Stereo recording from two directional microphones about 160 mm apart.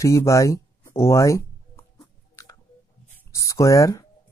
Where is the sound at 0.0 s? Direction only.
20° left (ahead or behind).